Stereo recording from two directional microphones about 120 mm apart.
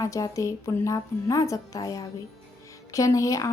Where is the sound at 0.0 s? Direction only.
25° left (ahead or behind).